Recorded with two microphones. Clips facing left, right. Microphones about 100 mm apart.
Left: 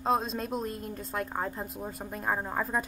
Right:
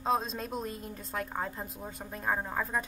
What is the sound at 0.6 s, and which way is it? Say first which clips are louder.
Speech: left 3 dB; 45° left (ahead or behind).